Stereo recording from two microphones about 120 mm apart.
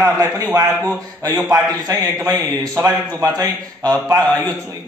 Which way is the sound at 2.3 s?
30° right (ahead or behind).